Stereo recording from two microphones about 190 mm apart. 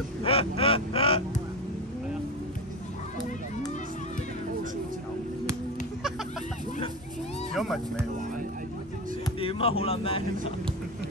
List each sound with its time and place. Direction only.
0.2 s honk: 30° left (ahead or behind)
7.5 s music: centre (ahead or behind)
9.4 s speech: 30° left (ahead or behind)